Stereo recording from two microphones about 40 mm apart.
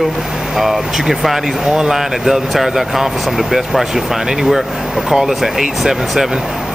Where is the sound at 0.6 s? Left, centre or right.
Centre.